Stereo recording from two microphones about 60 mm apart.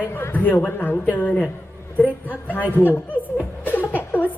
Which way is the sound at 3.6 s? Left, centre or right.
Left.